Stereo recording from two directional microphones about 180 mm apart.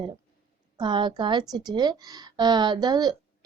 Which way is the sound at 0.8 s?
25° right (ahead or behind).